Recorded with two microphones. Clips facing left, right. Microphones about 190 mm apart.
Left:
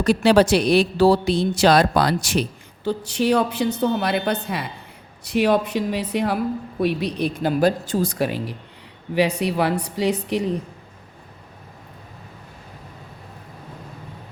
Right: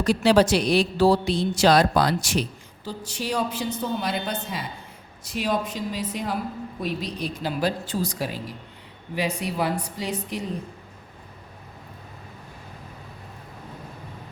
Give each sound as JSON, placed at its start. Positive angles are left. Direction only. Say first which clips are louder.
{"t": 0.0, "sound": "a woman's voice", "louder": "left 3 dB", "side_deg": 60}